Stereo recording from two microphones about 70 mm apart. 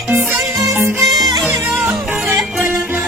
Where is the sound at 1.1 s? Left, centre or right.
Right.